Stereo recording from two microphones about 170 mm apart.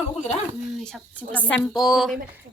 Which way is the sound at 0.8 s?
5° left (ahead or behind).